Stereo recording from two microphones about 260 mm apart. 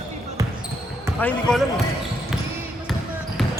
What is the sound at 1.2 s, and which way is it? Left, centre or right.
Speech, centre.